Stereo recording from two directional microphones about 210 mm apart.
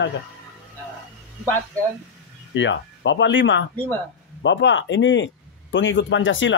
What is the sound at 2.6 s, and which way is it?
A man's voice, 60° left (ahead or behind).